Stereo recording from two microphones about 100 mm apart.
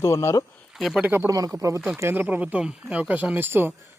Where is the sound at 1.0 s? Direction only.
25° right (ahead or behind).